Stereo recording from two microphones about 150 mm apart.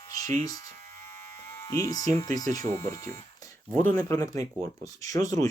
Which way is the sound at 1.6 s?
25° left (ahead or behind).